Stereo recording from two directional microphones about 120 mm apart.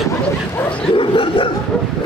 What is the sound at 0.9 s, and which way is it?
Dog, 45° left (ahead or behind).